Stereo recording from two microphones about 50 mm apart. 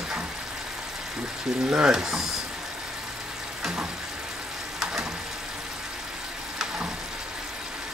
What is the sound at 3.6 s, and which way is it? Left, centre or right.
Frying, centre.